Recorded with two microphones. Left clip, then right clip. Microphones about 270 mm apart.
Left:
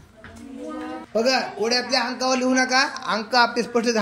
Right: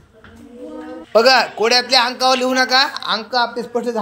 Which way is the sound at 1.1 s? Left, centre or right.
Centre.